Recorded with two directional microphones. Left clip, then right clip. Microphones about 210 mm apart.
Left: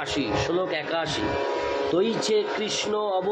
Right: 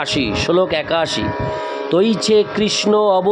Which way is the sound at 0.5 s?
55° right (ahead or behind).